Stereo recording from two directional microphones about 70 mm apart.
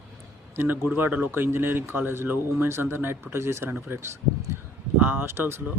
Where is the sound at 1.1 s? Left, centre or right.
Right.